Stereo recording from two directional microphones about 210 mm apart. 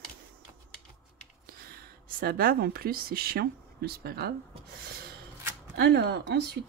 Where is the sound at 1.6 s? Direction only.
45° right (ahead or behind).